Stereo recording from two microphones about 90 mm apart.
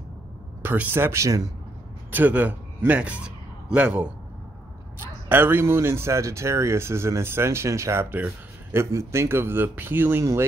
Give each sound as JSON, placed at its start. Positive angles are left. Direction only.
{"t": 0.6, "sound": "speech", "side_deg": -20}
{"t": 2.0, "sound": "a man's voice", "side_deg": -20}